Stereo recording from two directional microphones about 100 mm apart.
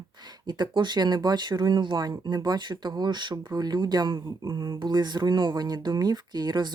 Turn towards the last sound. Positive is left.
turn(degrees=-45)  # may be behind; listen again after turning